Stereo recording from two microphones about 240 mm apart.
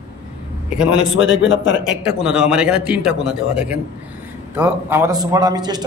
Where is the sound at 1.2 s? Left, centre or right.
Left.